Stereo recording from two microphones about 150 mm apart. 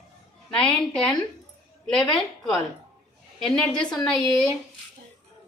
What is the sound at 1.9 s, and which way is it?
Speech, 30° left (ahead or behind).